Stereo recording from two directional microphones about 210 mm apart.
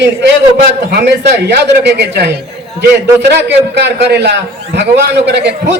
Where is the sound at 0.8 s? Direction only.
50° right (ahead or behind).